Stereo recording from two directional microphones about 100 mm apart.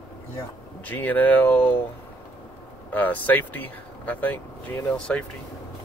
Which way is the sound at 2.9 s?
15° left (ahead or behind).